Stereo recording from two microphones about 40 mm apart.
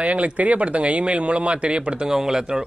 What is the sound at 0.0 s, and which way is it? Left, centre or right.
Speech, right.